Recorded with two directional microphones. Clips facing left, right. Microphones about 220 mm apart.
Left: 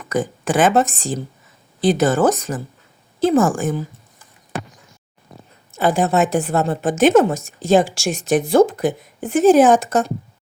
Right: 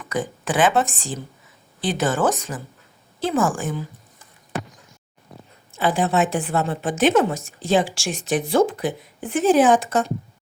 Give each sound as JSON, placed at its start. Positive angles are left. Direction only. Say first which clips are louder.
{"t": 0.1, "sound": "a woman's voice", "louder": "left 5 dB", "side_deg": 45}
{"t": 5.7, "sound": "a woman's voice", "louder": "left 3 dB", "side_deg": 45}